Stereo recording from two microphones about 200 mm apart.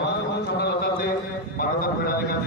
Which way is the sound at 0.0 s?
55° left (ahead or behind).